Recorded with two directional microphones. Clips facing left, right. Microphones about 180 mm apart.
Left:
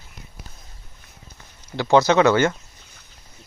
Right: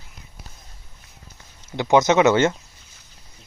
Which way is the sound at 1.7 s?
20° right (ahead or behind).